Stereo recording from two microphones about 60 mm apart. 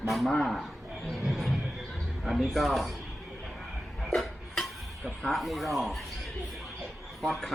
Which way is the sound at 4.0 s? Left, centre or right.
Centre.